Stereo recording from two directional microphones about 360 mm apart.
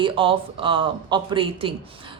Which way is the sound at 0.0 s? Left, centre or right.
Centre.